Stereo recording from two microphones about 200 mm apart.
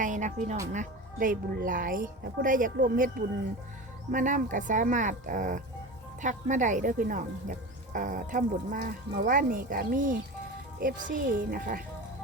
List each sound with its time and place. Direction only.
0.0 s music: 40° right (ahead or behind)
0.7 s a woman's voice: 40° right (ahead or behind)